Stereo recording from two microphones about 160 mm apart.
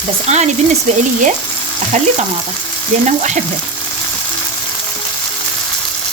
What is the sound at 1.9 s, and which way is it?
Frying, 50° right (ahead or behind).